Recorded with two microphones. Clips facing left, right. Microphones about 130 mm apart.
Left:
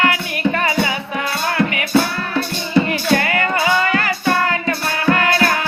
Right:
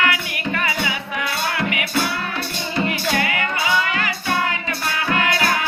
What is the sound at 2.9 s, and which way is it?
Music, 45° left (ahead or behind).